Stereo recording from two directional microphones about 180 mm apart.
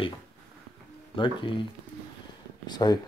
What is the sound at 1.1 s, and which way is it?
Speech, 30° left (ahead or behind).